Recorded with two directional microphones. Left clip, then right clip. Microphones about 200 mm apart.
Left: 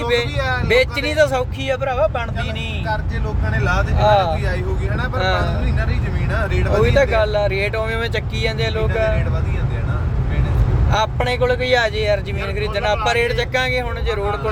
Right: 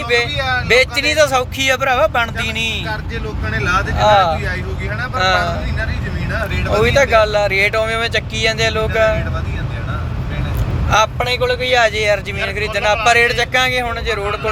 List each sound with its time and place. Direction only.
0.3 s speech: 20° left (ahead or behind)
0.7 s speech: 5° left (ahead or behind)
3.5 s speech: 15° left (ahead or behind)
3.9 s speech: centre (ahead or behind)
6.8 s speech: centre (ahead or behind)
11.2 s speech: 15° left (ahead or behind)
11.8 s speech: centre (ahead or behind)